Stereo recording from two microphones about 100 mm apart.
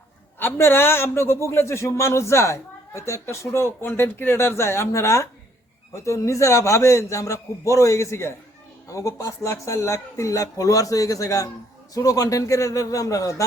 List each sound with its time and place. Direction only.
0.3 s a man's voice: 20° left (ahead or behind)